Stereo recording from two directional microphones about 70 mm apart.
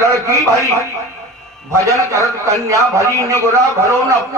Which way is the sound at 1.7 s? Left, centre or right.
Right.